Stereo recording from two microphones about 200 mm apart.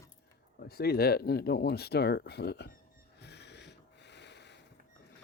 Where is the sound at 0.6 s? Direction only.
50° left (ahead or behind).